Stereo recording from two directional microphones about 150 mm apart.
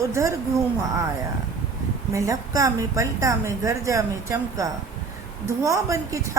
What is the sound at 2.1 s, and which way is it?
A woman's voice, 20° right (ahead or behind).